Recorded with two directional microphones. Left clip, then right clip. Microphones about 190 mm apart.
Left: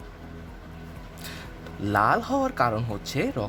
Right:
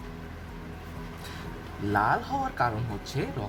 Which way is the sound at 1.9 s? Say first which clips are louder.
Left 3 dB; 60° left (ahead or behind).